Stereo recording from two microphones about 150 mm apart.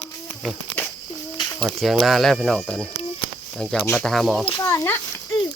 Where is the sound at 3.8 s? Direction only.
5° left (ahead or behind).